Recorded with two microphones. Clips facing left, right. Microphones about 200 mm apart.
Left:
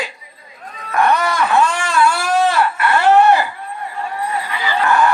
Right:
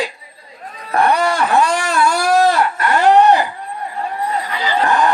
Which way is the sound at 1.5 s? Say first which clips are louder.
Right 1 dB; 40° right (ahead or behind).